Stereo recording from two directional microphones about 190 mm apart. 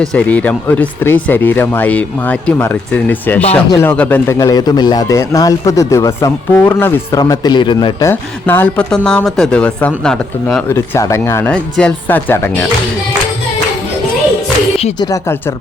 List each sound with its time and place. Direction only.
0.0 s a man's voice: 5° left (ahead or behind)
10.7 s a man's voice: 15° left (ahead or behind)
14.8 s speech: 30° left (ahead or behind)
15.0 s a man's voice: 15° left (ahead or behind)